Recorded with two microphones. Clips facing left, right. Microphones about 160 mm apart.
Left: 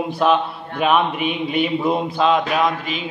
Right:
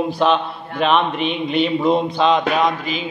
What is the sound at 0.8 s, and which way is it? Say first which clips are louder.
A man's voice: even; 10° left (ahead or behind).